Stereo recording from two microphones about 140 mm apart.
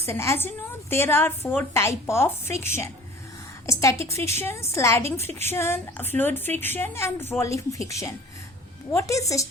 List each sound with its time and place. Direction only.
0.0 s a woman's voice: 20° left (ahead or behind)